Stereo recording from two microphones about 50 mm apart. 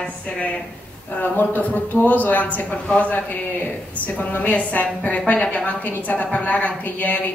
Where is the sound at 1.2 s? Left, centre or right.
Left.